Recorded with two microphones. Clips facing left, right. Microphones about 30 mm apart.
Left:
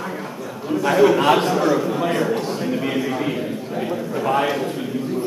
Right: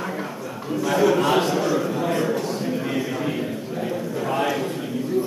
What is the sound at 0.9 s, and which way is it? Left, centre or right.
Speech, left.